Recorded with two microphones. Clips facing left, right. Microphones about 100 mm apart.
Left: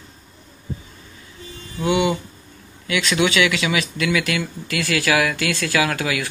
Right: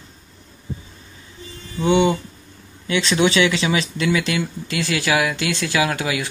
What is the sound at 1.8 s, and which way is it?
Speech, 30° right (ahead or behind).